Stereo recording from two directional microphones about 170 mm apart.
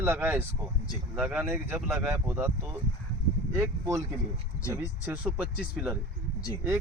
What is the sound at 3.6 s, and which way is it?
Speech, 15° right (ahead or behind).